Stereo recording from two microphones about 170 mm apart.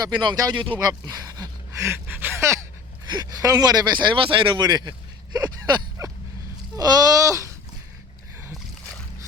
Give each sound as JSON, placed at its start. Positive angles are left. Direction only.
{"t": 0.0, "sound": "speech", "side_deg": -25}